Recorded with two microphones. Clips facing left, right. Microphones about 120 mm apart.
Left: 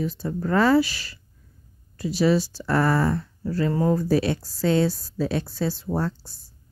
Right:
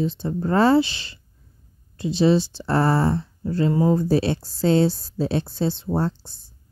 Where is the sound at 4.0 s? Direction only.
30° right (ahead or behind).